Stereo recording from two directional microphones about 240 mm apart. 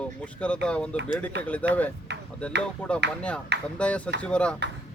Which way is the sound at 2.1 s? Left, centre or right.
Right.